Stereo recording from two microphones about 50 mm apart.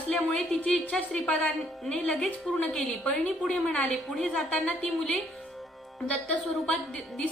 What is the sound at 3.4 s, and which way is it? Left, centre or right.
A woman's voice, centre.